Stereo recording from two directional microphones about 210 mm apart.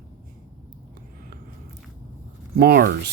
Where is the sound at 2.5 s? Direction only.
50° right (ahead or behind).